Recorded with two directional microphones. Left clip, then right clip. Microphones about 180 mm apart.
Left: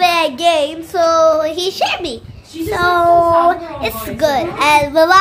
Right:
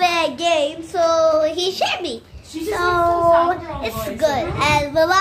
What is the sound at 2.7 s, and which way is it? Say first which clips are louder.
Speech: left 5 dB; 20° left (ahead or behind).